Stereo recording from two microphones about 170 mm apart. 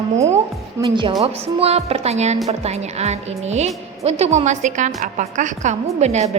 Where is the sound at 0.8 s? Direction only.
30° right (ahead or behind).